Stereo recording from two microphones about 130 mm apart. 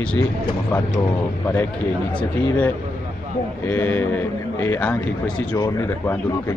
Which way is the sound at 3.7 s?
15° left (ahead or behind).